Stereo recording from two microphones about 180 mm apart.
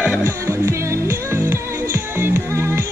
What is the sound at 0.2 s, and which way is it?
Music, 15° right (ahead or behind).